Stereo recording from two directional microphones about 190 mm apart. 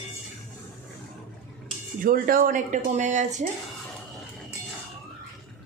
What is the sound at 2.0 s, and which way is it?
Speech, 50° right (ahead or behind).